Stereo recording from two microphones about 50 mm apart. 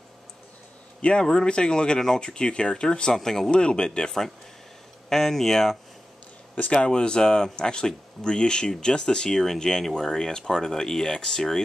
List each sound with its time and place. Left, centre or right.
1.0 s speech: centre
5.1 s speech: centre